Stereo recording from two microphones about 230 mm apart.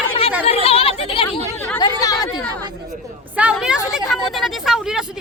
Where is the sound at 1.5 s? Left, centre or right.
Centre.